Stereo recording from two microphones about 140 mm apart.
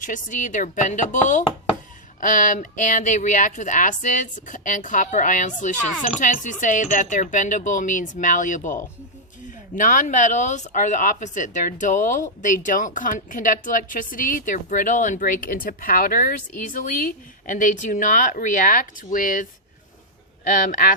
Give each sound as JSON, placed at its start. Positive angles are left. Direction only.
{"t": 0.0, "sound": "speech", "side_deg": 65}
{"t": 20.5, "sound": "speech", "side_deg": 80}